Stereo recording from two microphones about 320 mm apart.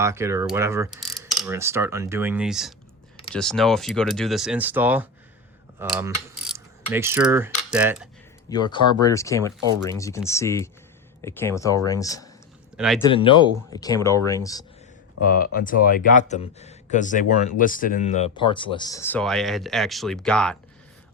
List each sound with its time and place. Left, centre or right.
0.0 s mechanisms: centre
3.3 s speech: centre
5.8 s mechanisms: centre
8.4 s speech: centre
12.7 s speech: centre
13.1 s speech: centre
15.2 s speech: left; by 20.6 s centre